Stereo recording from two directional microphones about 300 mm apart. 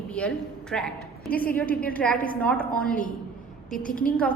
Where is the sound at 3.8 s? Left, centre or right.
Left.